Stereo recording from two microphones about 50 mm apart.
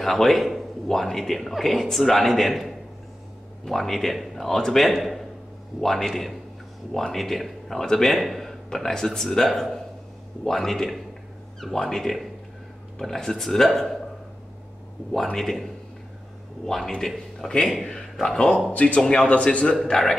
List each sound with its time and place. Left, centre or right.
0.0 s a man's voice: centre
15.3 s speech: centre
18.7 s speech: left
19.0 s speech: centre
19.3 s speech: left
19.6 s speech: centre